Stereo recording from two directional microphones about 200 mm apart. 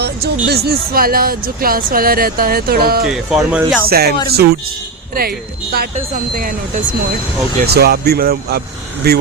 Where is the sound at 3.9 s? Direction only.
50° right (ahead or behind).